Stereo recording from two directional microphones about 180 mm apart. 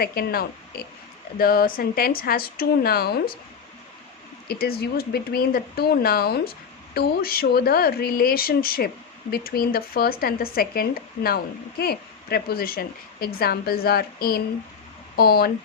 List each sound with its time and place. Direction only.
0.0 s a woman's voice: 60° left (ahead or behind)
4.4 s a woman's voice: 60° left (ahead or behind)